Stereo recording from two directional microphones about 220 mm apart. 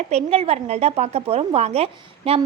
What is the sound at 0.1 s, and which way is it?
A woman's voice, 30° right (ahead or behind).